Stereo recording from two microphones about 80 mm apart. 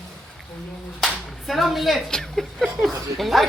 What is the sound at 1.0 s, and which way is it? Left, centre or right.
Clapping, centre.